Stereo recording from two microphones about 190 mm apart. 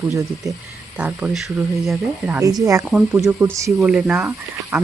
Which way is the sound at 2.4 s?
15° right (ahead or behind).